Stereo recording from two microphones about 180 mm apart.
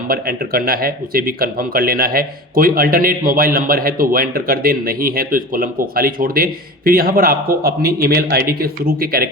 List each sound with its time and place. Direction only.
0.1 s speech: 55° right (ahead or behind)